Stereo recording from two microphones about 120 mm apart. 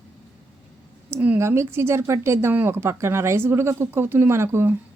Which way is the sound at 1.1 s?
20° right (ahead or behind).